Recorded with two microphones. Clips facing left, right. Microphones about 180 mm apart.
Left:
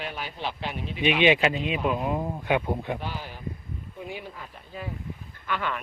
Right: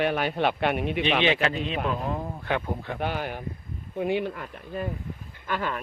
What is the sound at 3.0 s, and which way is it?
A man's voice, 60° right (ahead or behind).